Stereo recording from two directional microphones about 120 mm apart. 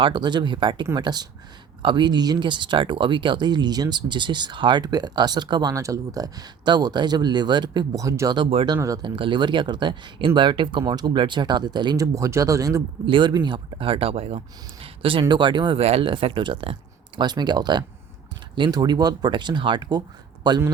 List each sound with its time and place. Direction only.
0.0 s speech: 40° right (ahead or behind)
8.4 s speech: 50° right (ahead or behind); by 12.8 s 25° right (ahead or behind)
13.1 s speech: 40° right (ahead or behind)
15.8 s speech: 55° right (ahead or behind)
17.2 s speech: 35° right (ahead or behind)